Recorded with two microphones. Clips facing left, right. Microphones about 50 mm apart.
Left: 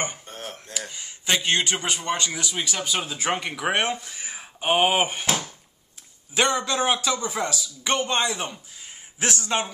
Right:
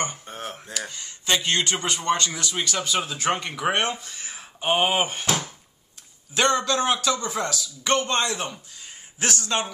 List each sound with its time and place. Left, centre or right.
0.3 s a sound: centre
0.7 s a man's voice: centre
6.3 s a man's voice: centre